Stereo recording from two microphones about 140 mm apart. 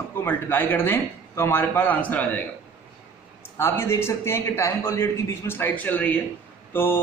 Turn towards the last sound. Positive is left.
turn(degrees=15)  # may be behind; listen again after turning